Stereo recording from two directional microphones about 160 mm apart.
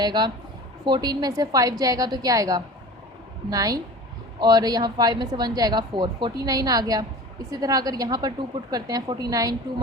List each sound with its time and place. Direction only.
0.0 s a woman's voice: 25° right (ahead or behind)